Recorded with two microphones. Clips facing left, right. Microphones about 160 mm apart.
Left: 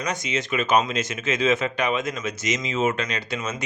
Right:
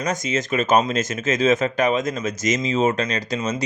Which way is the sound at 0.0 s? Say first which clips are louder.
Right 4 dB; 45° right (ahead or behind).